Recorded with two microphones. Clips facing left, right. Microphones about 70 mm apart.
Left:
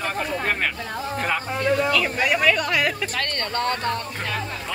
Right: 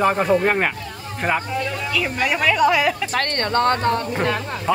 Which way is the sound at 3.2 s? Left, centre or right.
Right.